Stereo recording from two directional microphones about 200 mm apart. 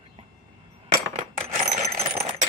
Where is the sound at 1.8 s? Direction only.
15° right (ahead or behind).